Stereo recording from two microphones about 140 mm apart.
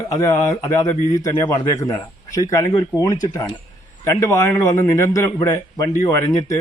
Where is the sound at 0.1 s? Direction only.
25° left (ahead or behind).